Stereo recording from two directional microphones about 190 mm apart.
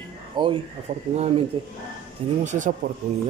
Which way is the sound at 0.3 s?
25° right (ahead or behind).